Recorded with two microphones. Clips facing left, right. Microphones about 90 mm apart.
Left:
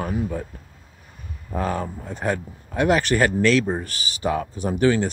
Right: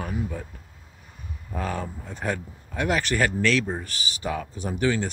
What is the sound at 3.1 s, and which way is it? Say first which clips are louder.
Speech: left 5 dB; 40° left (ahead or behind).